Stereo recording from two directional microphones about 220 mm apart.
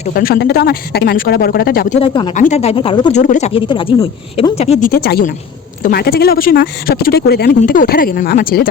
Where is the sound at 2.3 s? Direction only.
35° left (ahead or behind).